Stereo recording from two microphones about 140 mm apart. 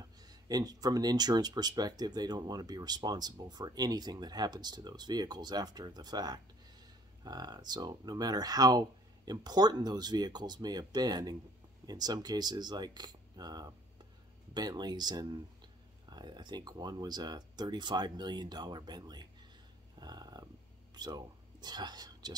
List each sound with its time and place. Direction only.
0.2 s speech: 25° right (ahead or behind)
20.0 s a sound: 30° right (ahead or behind)
20.9 s speech: 30° right (ahead or behind)